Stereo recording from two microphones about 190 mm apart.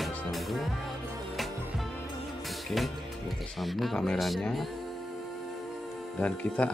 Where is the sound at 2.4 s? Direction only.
Centre (ahead or behind).